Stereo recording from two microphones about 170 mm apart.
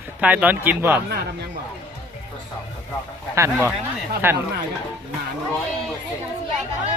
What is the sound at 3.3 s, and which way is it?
Speech, 15° right (ahead or behind).